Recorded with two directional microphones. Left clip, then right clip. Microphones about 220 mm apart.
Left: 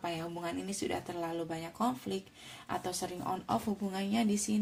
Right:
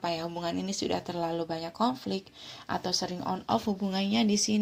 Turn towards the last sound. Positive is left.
turn(degrees=-30)  # may be behind; listen again after turning